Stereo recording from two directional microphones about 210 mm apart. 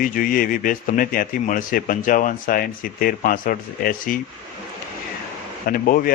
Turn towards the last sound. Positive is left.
turn(degrees=40)  # may be behind; listen again after turning